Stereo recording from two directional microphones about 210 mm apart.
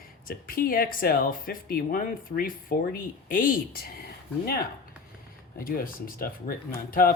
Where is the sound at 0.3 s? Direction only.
45° left (ahead or behind).